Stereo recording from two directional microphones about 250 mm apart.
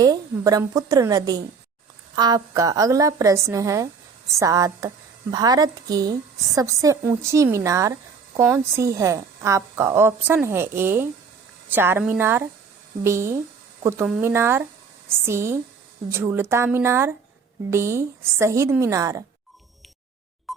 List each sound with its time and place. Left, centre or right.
0.0 s a woman's voice: centre